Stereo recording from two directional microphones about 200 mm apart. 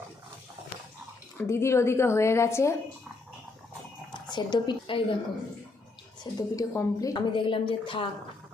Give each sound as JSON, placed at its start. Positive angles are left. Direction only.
{"t": 1.4, "sound": "a woman's voice", "side_deg": 15}
{"t": 4.1, "sound": "a woman's voice", "side_deg": 20}
{"t": 6.3, "sound": "a woman's voice", "side_deg": 20}